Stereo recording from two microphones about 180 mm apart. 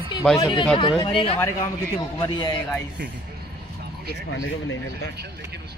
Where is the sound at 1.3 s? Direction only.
15° left (ahead or behind).